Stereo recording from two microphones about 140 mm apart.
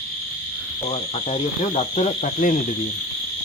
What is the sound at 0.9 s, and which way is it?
Speech, 50° left (ahead or behind).